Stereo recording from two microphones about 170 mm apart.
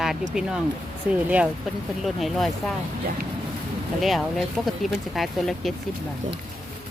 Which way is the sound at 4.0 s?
Centre (ahead or behind).